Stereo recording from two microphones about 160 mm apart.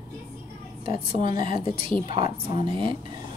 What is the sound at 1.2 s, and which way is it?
Speech, 30° right (ahead or behind).